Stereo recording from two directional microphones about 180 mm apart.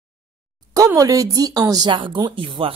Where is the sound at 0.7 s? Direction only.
20° right (ahead or behind).